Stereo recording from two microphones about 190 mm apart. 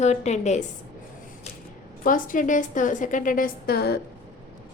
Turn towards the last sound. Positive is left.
turn(degrees=55)  # may be behind; listen again after turning